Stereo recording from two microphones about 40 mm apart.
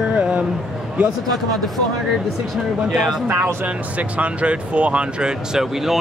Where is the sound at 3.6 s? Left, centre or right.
Right.